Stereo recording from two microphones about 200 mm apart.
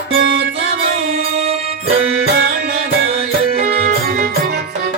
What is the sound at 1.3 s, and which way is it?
Music, 30° right (ahead or behind).